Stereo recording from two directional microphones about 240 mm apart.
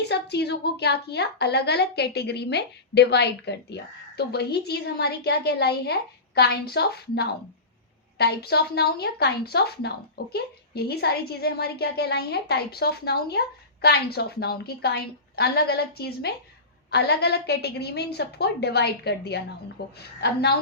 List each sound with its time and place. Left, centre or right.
0.0 s a woman's voice: left